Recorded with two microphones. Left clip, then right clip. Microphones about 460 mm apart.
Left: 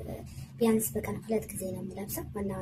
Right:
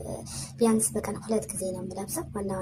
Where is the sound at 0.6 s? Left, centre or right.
Left.